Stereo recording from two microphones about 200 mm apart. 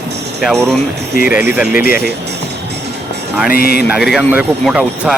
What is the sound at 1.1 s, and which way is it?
Speech, 45° left (ahead or behind).